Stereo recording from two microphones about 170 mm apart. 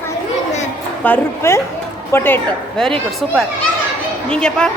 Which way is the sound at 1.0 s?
10° left (ahead or behind).